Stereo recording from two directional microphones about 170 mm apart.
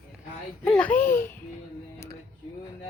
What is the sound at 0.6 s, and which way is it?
Speech, 10° left (ahead or behind).